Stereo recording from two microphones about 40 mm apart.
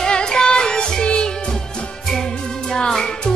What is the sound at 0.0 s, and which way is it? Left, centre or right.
Music, centre.